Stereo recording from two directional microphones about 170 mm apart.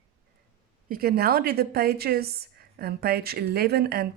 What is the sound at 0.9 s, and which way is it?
A woman's voice, 65° right (ahead or behind).